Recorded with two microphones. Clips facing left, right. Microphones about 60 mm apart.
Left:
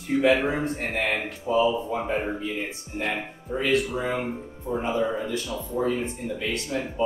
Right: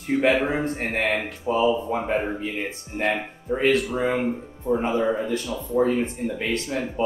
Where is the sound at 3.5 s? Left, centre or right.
Right.